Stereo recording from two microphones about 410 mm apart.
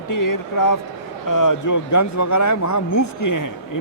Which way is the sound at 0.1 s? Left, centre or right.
Left.